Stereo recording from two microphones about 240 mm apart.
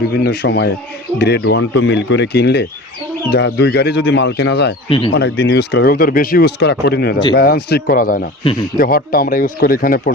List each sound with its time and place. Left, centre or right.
0.2 s speech: left
4.9 s speech: left
5.1 s speech: left